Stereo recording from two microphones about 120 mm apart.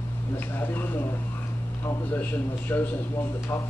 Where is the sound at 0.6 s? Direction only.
15° left (ahead or behind).